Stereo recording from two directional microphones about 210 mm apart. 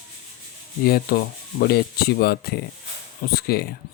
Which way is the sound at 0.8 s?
45° left (ahead or behind).